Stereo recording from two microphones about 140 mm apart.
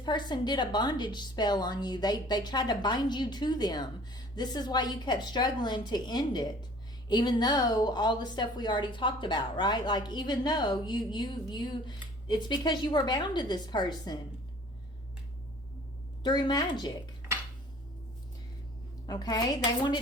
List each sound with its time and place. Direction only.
0.0 s a woman's voice: 30° left (ahead or behind)
16.2 s speech: 30° left (ahead or behind)
19.0 s speech: 30° left (ahead or behind)